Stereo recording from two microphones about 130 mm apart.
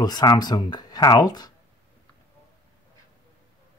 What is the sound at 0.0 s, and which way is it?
Speech, 35° left (ahead or behind).